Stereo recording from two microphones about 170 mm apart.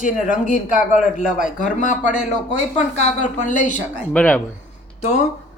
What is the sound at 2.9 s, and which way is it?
Speech, 45° left (ahead or behind).